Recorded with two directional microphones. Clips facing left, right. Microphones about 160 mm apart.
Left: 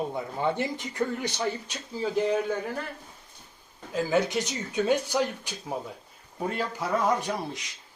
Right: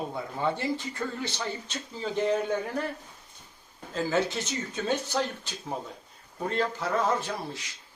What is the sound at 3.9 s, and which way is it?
A man's voice, 15° left (ahead or behind).